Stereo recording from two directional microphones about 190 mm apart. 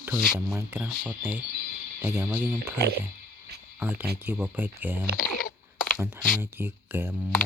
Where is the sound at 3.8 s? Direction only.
10° right (ahead or behind).